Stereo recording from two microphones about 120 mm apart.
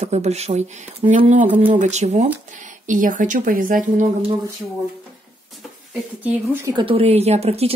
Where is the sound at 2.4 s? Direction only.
90° right.